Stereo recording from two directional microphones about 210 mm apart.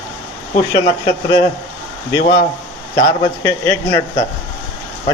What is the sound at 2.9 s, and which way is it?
Speech, 25° left (ahead or behind).